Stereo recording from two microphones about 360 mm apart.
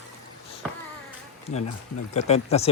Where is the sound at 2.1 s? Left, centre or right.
Centre.